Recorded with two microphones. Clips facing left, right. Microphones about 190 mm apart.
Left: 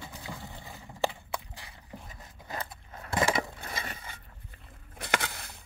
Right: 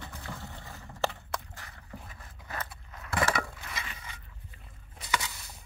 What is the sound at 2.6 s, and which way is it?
Biting, 30° left (ahead or behind).